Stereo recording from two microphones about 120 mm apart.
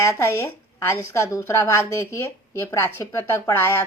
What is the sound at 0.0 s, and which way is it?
A woman's voice, 25° left (ahead or behind).